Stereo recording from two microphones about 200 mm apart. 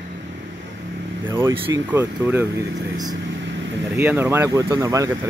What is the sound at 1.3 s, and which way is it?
Speech, 25° right (ahead or behind).